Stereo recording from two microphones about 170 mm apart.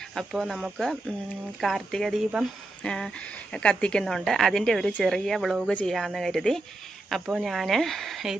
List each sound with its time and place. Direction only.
0.1 s speech: centre (ahead or behind)